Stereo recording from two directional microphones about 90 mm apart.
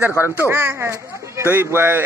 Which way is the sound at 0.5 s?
25° right (ahead or behind).